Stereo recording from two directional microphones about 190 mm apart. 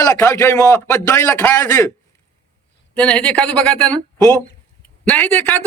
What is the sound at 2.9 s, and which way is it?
A man's voice, 5° left (ahead or behind).